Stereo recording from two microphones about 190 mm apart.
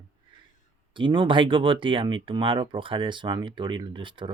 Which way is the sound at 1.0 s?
25° right (ahead or behind).